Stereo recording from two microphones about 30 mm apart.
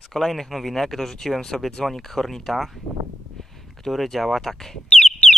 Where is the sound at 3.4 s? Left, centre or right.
Centre.